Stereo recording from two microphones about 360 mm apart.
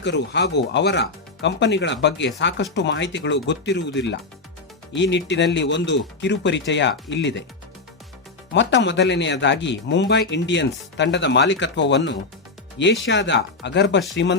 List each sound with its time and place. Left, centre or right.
0.0 s speech: left
8.5 s speech: left